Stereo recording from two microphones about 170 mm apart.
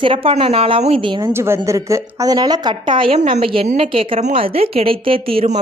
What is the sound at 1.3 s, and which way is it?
A woman's voice, 15° right (ahead or behind).